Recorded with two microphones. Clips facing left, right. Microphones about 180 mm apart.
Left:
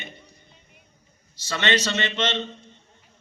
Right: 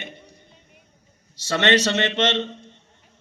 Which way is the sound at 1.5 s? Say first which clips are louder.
Right 5 dB; 75° right (ahead or behind).